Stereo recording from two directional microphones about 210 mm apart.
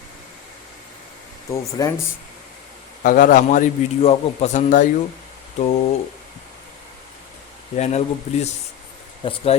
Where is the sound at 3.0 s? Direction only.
40° left (ahead or behind).